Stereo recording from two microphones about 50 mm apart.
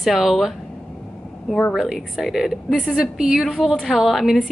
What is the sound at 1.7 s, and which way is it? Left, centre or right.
A woman's voice, centre.